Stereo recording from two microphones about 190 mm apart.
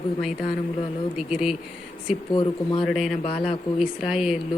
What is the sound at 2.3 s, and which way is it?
Speech, 25° left (ahead or behind).